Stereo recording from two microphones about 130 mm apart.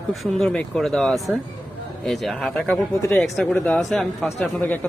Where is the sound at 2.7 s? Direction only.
15° left (ahead or behind).